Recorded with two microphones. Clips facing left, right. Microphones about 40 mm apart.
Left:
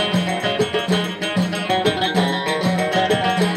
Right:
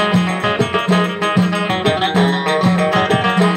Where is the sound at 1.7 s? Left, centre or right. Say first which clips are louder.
Right 3 dB; right.